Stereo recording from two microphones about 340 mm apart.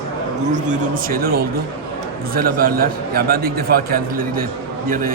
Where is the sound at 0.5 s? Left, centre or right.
Right.